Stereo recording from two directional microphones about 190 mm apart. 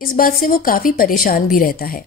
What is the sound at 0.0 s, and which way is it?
A woman's voice, 50° left (ahead or behind).